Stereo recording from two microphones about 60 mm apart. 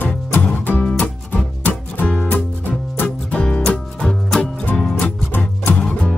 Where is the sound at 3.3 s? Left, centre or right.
Centre.